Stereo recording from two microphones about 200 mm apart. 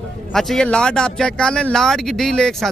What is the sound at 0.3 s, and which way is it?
A man's voice, centre (ahead or behind).